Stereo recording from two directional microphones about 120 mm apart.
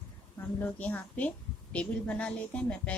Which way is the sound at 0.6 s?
10° left (ahead or behind).